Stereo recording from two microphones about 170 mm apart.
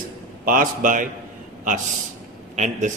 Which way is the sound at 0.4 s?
55° right (ahead or behind).